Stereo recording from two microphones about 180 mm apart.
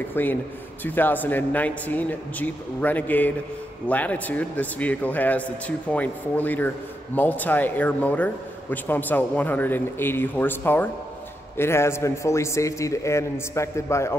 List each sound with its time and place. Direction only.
0.1 s speech: 10° left (ahead or behind)